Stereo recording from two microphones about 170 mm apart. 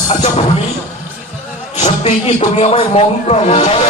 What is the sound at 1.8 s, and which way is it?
Speech, 40° left (ahead or behind).